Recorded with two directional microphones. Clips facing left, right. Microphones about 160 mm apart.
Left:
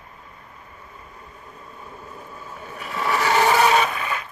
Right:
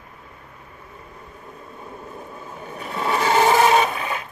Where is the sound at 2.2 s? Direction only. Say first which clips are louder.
Right 2 dB; 25° right (ahead or behind).